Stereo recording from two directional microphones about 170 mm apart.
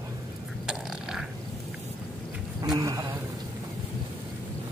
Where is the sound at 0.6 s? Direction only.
5° right (ahead or behind).